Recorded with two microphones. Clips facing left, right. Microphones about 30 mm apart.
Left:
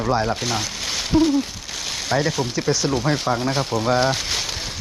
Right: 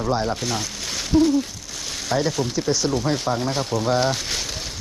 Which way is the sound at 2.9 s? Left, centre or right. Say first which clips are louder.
Left 1 dB; left.